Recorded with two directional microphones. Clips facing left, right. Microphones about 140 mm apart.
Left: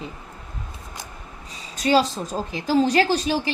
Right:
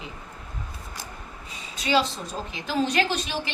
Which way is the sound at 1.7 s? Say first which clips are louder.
Left 5 dB; 45° left (ahead or behind).